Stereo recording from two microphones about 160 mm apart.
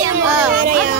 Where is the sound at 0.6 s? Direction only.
60° right (ahead or behind).